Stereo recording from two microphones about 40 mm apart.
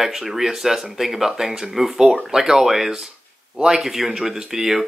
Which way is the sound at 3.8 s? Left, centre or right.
Centre.